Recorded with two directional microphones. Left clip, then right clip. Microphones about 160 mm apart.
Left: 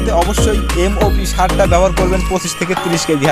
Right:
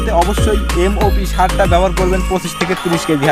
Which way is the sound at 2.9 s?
20° left (ahead or behind).